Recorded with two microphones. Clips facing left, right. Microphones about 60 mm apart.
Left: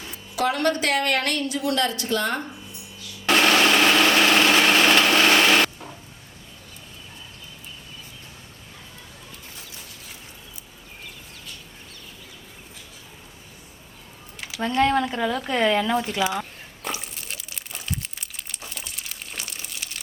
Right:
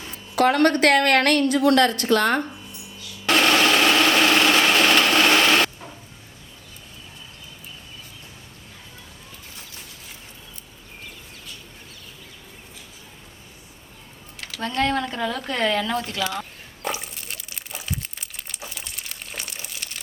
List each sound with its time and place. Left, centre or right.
0.3 s a woman's voice: right
3.2 s light engine: centre
14.4 s speech: centre
16.8 s crunch: centre